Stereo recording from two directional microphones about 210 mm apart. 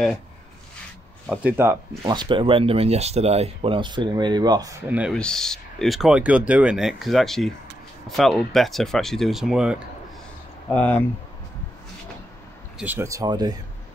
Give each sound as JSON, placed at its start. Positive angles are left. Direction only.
{"t": 1.3, "sound": "speech", "side_deg": -10}
{"t": 5.1, "sound": "speech", "side_deg": 5}
{"t": 10.7, "sound": "speech", "side_deg": 5}
{"t": 12.7, "sound": "speech", "side_deg": -10}